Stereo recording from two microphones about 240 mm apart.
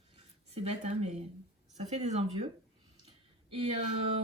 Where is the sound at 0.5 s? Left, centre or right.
Right.